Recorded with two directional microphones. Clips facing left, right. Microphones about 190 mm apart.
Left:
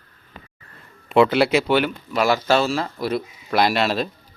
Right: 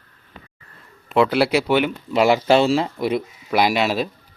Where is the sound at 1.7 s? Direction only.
20° right (ahead or behind).